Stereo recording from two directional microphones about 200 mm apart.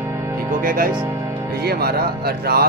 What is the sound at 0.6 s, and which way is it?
Speech, 45° right (ahead or behind).